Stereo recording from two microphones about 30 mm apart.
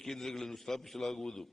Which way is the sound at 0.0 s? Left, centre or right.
Centre.